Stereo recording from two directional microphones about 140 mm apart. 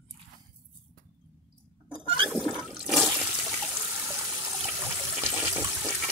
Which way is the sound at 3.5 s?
5° right (ahead or behind).